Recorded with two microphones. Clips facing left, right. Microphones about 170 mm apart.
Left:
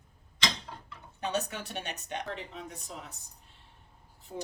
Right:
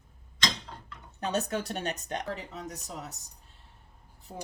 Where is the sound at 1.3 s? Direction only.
40° right (ahead or behind).